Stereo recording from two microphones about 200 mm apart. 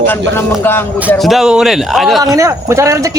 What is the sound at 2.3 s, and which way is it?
Speech, 15° right (ahead or behind).